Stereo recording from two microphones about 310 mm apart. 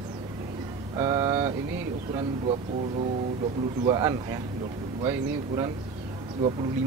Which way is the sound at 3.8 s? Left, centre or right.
Centre.